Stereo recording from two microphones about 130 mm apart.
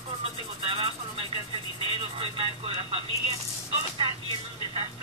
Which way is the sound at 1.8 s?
45° right (ahead or behind).